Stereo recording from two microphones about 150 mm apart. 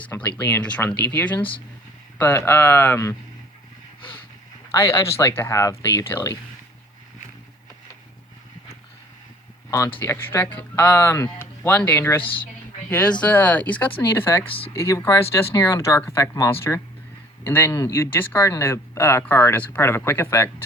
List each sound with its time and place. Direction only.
0.1 s speech: 10° left (ahead or behind)
4.7 s speech: 20° left (ahead or behind)
9.6 s speech: 20° left (ahead or behind)